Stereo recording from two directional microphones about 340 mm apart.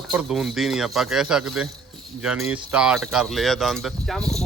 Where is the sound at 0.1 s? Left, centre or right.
Centre.